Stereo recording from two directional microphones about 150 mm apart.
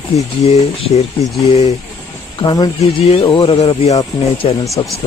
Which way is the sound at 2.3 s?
30° left (ahead or behind).